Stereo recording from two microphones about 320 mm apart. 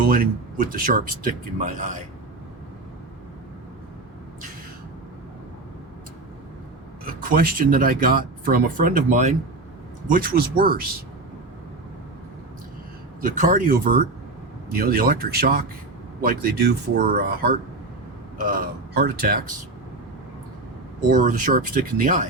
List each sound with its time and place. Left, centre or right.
0.1 s speech: right
7.0 s speech: right
13.2 s speech: right
21.1 s speech: right